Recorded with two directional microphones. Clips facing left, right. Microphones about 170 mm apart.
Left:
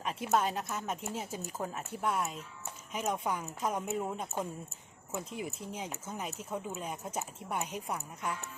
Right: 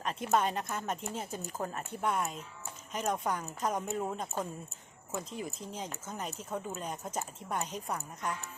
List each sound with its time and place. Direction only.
0.0 s a woman's voice: 5° left (ahead or behind)